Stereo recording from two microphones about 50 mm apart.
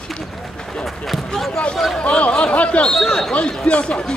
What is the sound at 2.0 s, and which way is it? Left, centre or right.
Speech, left.